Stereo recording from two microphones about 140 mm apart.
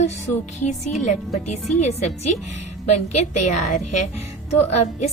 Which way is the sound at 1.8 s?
50° left (ahead or behind).